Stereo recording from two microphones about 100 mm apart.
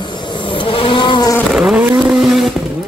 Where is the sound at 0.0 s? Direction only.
55° left (ahead or behind).